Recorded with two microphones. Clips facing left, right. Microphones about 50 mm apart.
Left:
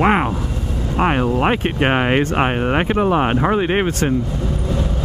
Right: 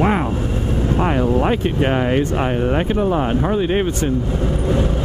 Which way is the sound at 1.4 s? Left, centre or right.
Left.